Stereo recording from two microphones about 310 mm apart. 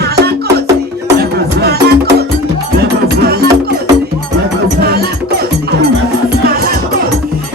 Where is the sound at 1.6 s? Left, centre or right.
Right.